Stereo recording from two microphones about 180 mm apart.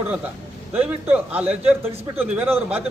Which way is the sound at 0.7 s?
10° right (ahead or behind).